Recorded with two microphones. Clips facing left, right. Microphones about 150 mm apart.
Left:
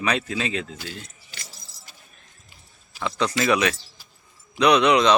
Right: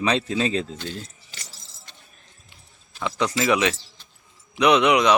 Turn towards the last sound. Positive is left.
turn(degrees=-15)  # may be behind; listen again after turning